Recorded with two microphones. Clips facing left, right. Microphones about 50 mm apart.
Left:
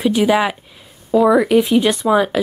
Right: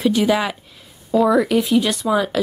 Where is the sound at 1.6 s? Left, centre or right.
Left.